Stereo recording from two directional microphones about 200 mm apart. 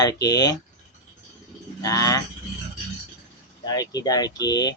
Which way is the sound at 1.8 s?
15° left (ahead or behind).